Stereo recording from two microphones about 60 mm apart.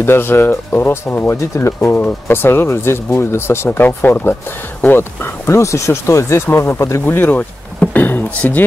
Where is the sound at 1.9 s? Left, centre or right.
Left.